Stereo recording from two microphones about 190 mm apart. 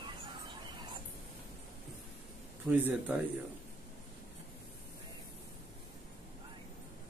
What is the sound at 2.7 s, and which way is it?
Speech, 10° right (ahead or behind).